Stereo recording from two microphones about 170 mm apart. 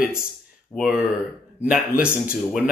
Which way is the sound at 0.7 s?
5° right (ahead or behind).